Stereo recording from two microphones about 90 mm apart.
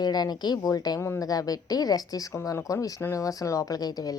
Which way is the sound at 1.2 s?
40° left (ahead or behind).